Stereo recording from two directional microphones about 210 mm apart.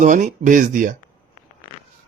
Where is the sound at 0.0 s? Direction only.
35° right (ahead or behind).